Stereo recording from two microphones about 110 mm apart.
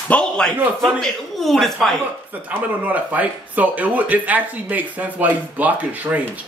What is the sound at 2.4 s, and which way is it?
Speech, 15° right (ahead or behind).